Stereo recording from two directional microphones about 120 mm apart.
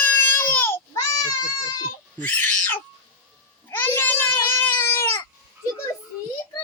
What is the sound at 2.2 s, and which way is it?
Owl, 15° left (ahead or behind).